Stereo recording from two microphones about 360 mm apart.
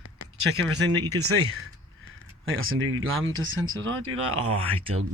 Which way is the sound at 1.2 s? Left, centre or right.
Right.